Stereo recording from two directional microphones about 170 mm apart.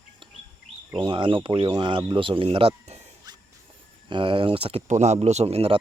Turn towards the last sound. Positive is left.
turn(degrees=-35)  # may be behind; listen again after turning